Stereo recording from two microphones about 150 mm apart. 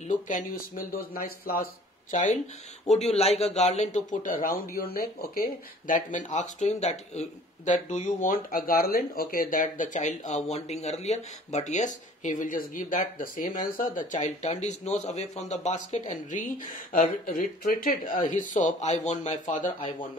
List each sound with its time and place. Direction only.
0.1 s speech: 60° left (ahead or behind); by 2.1 s 80° left
2.9 s a man's voice: 45° left (ahead or behind); by 4.6 s 65° left (ahead or behind)
4.7 s speech: 80° left
13.9 s a man's voice: 50° left (ahead or behind)
16.9 s a man's voice: 65° left (ahead or behind)